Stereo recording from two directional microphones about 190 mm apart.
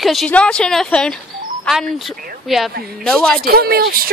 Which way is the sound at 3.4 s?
55° right (ahead or behind).